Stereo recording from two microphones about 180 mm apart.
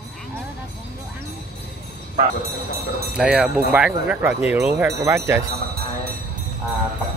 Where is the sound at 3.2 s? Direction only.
5° right (ahead or behind).